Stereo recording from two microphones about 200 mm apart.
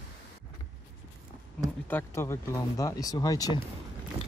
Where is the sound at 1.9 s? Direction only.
10° left (ahead or behind).